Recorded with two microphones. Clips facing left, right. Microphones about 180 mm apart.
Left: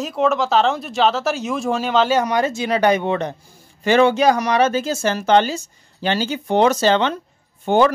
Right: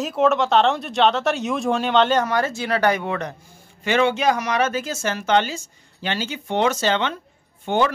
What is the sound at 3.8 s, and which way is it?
Speech, 40° left (ahead or behind).